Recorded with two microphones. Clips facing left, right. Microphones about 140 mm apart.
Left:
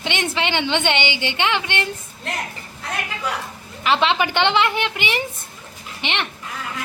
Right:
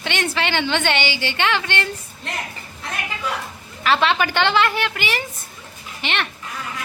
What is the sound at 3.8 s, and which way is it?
A woman's voice, 20° left (ahead or behind).